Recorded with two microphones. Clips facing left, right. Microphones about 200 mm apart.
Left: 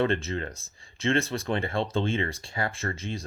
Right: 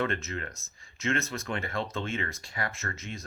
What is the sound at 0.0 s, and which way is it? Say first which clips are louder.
Speech: left 5 dB; 30° left (ahead or behind).